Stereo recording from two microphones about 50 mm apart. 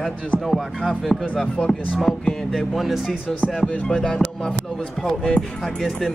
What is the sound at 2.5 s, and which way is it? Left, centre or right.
Speech, centre.